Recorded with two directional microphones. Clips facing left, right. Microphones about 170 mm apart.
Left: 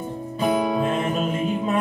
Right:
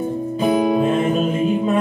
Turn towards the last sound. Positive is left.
turn(degrees=-20)  # may be behind; listen again after turning